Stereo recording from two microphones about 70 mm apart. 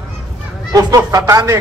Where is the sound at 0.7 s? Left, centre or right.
Right.